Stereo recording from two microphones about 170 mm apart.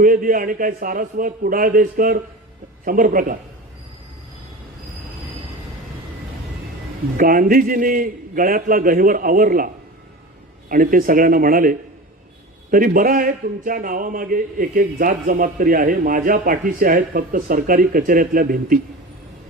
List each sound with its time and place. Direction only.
0.0 s a man's voice: 55° right (ahead or behind)
7.2 s a man's voice: 55° right (ahead or behind)